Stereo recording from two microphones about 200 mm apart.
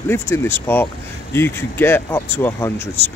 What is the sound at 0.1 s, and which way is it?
Speech, 10° left (ahead or behind).